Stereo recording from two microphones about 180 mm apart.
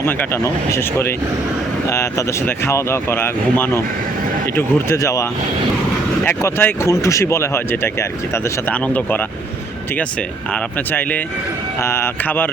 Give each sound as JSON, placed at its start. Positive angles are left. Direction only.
{"t": 0.0, "sound": "speech", "side_deg": 10}